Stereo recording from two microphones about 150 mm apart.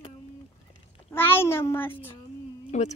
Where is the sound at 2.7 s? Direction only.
50° left (ahead or behind).